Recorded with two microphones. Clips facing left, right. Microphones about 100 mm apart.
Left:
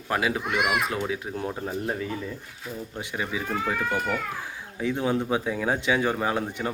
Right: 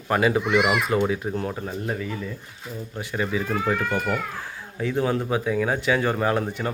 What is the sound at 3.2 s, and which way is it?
Speech, 10° left (ahead or behind).